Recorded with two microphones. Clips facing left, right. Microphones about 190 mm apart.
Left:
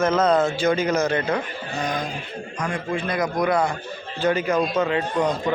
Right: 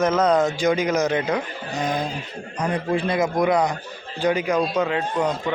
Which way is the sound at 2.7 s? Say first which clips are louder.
Right 4 dB; 35° right (ahead or behind).